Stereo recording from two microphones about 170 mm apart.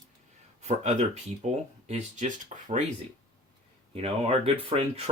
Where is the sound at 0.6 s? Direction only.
40° right (ahead or behind).